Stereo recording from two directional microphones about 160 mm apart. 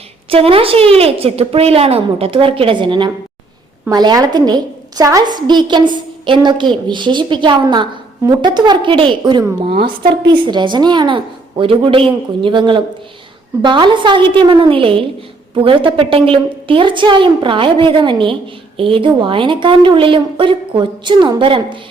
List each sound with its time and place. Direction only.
0.3 s a woman's voice: 35° right (ahead or behind)